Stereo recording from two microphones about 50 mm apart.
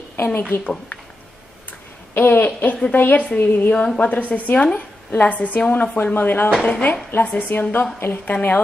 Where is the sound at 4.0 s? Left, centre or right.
Left.